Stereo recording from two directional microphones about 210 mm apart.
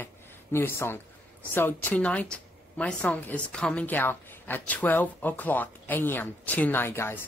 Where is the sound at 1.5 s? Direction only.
10° left (ahead or behind).